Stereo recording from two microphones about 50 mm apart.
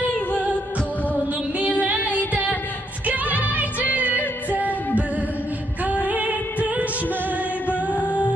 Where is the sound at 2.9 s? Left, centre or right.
Right.